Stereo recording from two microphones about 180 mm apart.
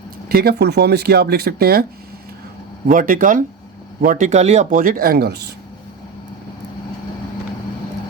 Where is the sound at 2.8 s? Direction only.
50° right (ahead or behind).